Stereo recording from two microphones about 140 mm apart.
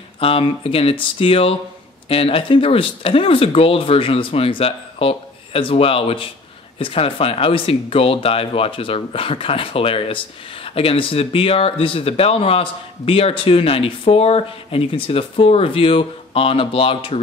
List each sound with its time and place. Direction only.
0.2 s speech: 40° left (ahead or behind)